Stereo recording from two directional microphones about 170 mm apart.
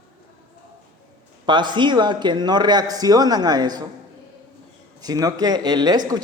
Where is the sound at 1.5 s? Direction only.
25° right (ahead or behind).